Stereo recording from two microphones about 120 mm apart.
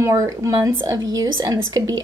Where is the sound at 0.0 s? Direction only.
30° right (ahead or behind).